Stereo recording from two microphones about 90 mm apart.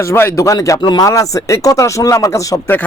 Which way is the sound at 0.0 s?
30° left (ahead or behind).